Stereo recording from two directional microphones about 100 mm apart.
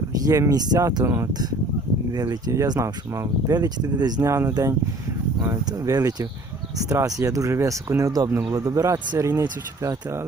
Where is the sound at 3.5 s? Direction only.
40° right (ahead or behind).